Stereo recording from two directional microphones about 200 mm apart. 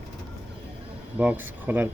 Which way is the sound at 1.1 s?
10° right (ahead or behind).